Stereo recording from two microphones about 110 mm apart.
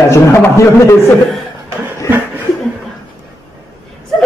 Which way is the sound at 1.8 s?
20° right (ahead or behind).